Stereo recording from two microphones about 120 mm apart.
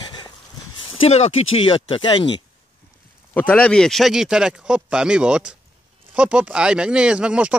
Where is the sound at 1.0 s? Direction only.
55° left (ahead or behind).